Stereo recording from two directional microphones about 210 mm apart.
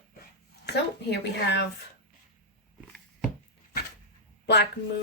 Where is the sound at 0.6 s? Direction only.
55° left (ahead or behind).